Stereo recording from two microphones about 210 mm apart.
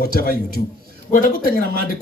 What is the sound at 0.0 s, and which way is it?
Speech, 45° left (ahead or behind).